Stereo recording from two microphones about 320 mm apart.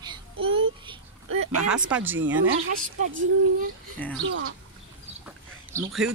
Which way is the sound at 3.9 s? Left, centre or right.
Centre.